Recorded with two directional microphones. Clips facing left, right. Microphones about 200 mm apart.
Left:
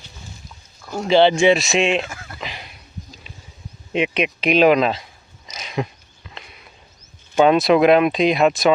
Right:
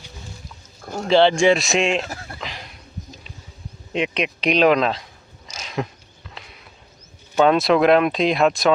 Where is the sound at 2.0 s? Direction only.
35° right (ahead or behind).